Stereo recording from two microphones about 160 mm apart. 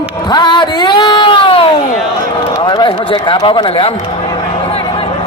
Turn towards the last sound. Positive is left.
turn(degrees=35)  # may be behind; listen again after turning